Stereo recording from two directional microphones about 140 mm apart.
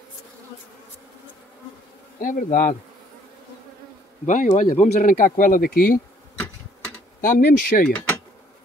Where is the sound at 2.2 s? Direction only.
75° left (ahead or behind).